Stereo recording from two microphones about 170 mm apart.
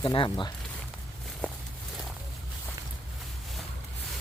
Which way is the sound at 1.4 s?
10° left (ahead or behind).